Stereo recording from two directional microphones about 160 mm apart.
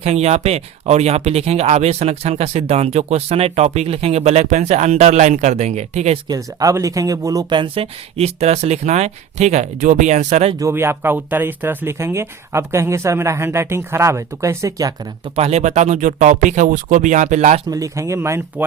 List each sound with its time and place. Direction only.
0.0 s speech: 40° right (ahead or behind)
6.2 s speech: 20° right (ahead or behind); by 10.5 s 45° right (ahead or behind)
10.6 s speech: 15° right (ahead or behind)
15.4 s speech: 40° right (ahead or behind)
17.7 s speech: 20° right (ahead or behind)